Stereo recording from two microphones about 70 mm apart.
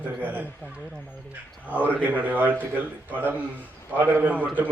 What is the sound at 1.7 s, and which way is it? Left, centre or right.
A man's voice, right.